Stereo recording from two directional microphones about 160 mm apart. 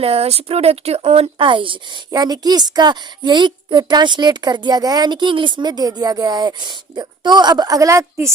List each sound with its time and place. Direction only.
0.0 s speech: 40° right (ahead or behind); by 8.3 s 20° right (ahead or behind)